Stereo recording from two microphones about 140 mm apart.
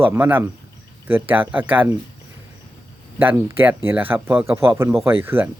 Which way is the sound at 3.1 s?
15° right (ahead or behind).